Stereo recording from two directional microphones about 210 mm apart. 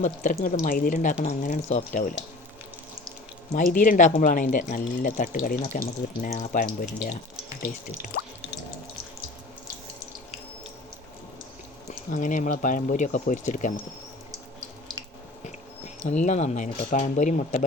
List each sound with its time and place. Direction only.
0.0 s speech: 35° left (ahead or behind)
3.5 s speech: 40° left (ahead or behind)
12.1 s speech: 35° left (ahead or behind)
16.0 s speech: 35° left (ahead or behind)